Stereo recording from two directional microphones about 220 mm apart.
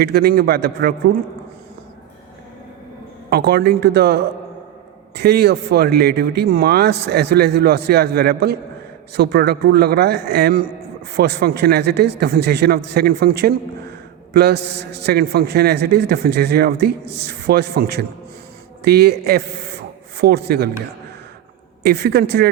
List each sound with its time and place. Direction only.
0.0 s a man's voice: 45° right (ahead or behind)
3.2 s a man's voice: 45° right (ahead or behind)
21.8 s a man's voice: 45° right (ahead or behind)